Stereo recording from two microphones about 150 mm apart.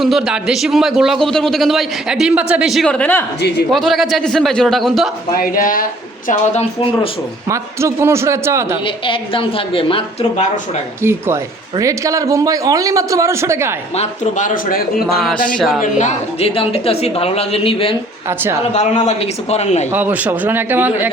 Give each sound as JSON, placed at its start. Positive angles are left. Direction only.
{"t": 0.0, "sound": "a man's voice", "side_deg": -5}
{"t": 5.3, "sound": "speech", "side_deg": 70}
{"t": 7.4, "sound": "a man's voice", "side_deg": -20}
{"t": 8.8, "sound": "a woman's voice", "side_deg": 35}
{"t": 11.8, "sound": "a man's voice", "side_deg": -20}
{"t": 13.9, "sound": "speech", "side_deg": 50}
{"t": 15.5, "sound": "a man's voice", "side_deg": 0}
{"t": 15.8, "sound": "a woman's voice", "side_deg": 50}
{"t": 18.3, "sound": "a man's voice", "side_deg": -15}
{"t": 18.7, "sound": "a man's voice", "side_deg": 50}
{"t": 19.9, "sound": "a man's voice", "side_deg": -10}